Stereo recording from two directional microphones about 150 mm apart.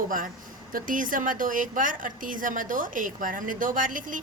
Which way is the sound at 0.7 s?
65° right (ahead or behind).